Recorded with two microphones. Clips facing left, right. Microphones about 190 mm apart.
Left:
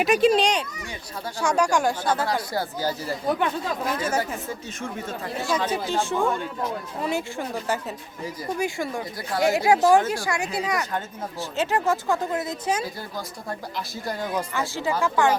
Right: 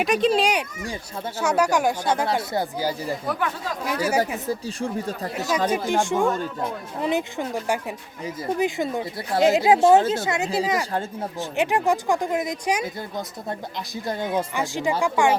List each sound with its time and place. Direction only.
0.0 s a child's voice: 5° left (ahead or behind)
2.0 s speech: 25° right (ahead or behind)
4.4 s speech: 35° right (ahead or behind)
5.5 s speech: 10° right (ahead or behind)